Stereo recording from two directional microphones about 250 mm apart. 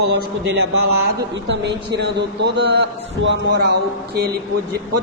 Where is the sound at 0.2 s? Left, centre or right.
Right.